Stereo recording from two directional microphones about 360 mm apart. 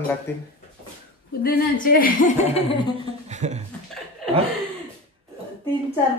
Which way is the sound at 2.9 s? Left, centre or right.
Centre.